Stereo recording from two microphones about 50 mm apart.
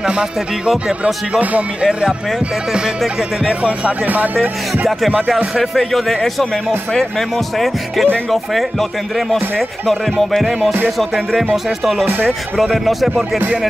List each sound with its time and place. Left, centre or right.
0.0 s speech: centre
1.4 s speech: right
1.9 s speech: centre
4.0 s speech: right
5.6 s speech: centre
12.1 s speech: right
12.7 s speech: centre